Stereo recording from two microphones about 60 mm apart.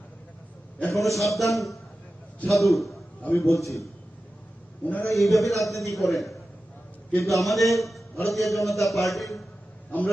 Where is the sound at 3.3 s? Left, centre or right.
Left.